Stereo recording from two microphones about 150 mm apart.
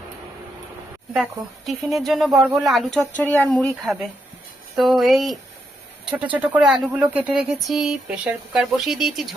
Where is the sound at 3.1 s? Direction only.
10° left (ahead or behind).